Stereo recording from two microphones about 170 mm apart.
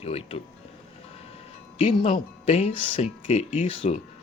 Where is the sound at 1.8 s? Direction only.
30° left (ahead or behind).